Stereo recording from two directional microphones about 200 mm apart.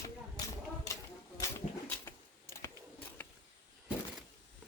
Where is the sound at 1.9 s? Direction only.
10° left (ahead or behind).